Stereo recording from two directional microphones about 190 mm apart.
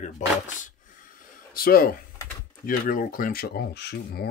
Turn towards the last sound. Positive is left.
turn(degrees=60)  # may be behind; listen again after turning